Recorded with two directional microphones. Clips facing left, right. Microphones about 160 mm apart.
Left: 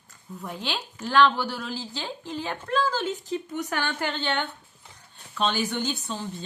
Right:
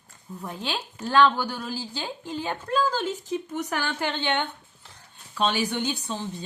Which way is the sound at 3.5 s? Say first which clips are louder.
Even; 5° right (ahead or behind).